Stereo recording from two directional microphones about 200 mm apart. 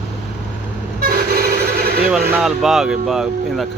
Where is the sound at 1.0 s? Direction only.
50° right (ahead or behind).